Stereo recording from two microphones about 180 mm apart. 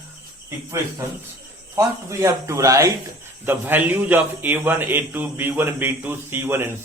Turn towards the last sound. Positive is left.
turn(degrees=-10)  # may be behind; listen again after turning